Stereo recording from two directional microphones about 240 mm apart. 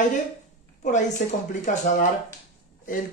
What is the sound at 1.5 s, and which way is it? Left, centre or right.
A man's voice, left.